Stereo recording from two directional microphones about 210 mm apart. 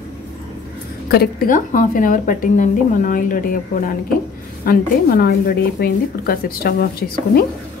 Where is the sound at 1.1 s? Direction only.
45° left (ahead or behind).